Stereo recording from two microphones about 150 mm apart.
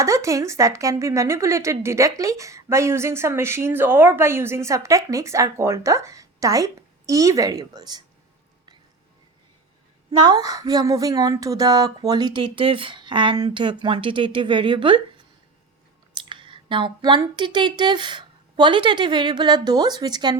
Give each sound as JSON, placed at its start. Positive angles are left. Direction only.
{"t": 0.0, "sound": "a woman's voice", "side_deg": -20}
{"t": 10.1, "sound": "a woman's voice", "side_deg": -30}
{"t": 16.1, "sound": "speech", "side_deg": -35}